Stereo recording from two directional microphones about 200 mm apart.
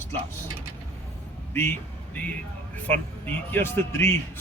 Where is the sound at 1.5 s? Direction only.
10° left (ahead or behind).